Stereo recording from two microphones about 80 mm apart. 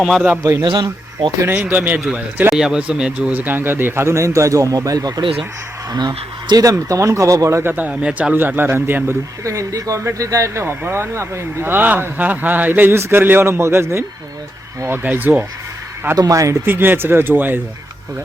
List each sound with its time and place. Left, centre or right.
0.0 s a man's voice: centre
0.6 s speech: right
1.5 s speech: right
2.5 s speech: centre; by 5.2 s right
5.9 s speech: right
6.7 s speech: right
7.6 s speech: right
9.4 s speech: right
16.1 s speech: right
16.6 s speech: right